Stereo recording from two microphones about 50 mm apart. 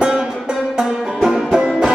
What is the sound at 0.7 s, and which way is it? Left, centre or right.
Music, centre.